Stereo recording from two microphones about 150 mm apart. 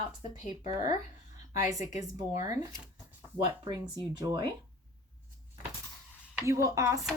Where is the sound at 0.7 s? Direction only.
25° right (ahead or behind).